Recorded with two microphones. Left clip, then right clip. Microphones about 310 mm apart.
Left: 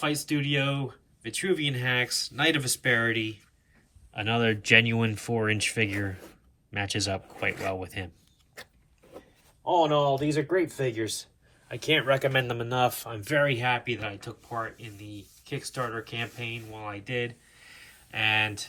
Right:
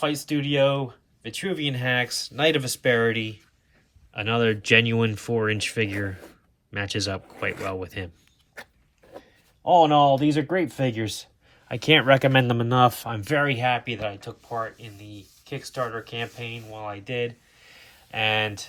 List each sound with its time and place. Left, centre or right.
0.0 s speech: centre
9.7 s speech: right